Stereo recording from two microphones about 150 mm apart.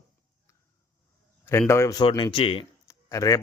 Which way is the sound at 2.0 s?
35° left (ahead or behind).